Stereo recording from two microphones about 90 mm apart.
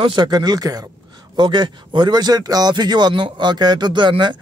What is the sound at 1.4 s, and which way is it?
Speech, 55° right (ahead or behind).